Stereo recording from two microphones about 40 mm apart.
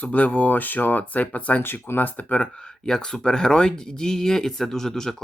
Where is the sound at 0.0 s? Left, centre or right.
Left.